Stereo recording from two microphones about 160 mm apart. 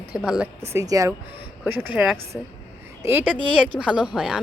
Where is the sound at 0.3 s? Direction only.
10° right (ahead or behind).